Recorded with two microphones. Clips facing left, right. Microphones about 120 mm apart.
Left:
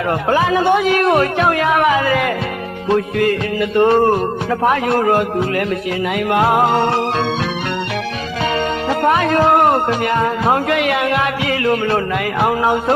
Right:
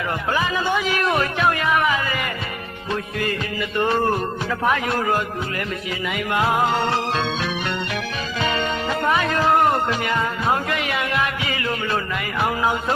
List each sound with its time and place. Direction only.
0.3 s a man's voice: 60° left (ahead or behind); by 2.3 s 80° left
2.9 s a man's voice: 60° left (ahead or behind)
8.9 s music: 55° left (ahead or behind)
10.4 s music: 70° left (ahead or behind)
12.4 s a man's voice: 60° left (ahead or behind)